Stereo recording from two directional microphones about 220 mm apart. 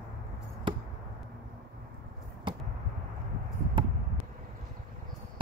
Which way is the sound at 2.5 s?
25° right (ahead or behind).